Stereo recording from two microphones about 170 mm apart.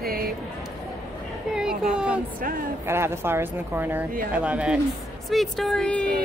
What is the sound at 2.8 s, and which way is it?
Speech, 15° right (ahead or behind).